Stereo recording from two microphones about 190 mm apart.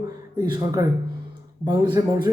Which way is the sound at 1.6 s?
20° right (ahead or behind).